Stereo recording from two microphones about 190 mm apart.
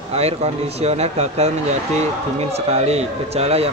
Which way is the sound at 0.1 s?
35° right (ahead or behind).